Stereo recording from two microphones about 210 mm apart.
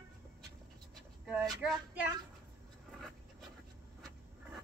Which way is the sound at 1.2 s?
5° right (ahead or behind).